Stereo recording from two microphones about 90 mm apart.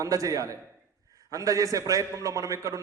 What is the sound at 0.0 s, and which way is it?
A man's voice, 40° right (ahead or behind).